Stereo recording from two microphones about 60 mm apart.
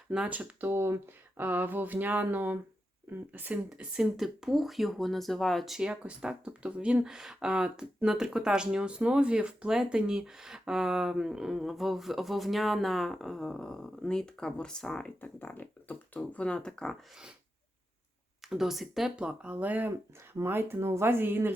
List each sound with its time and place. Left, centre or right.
0.3 s speech: right
0.7 s speech: right
3.7 s speech: centre
5.9 s speech: centre
15.2 s speech: left; by 16.9 s centre
18.4 s speech: centre
19.1 s speech: centre
20.1 s speech: right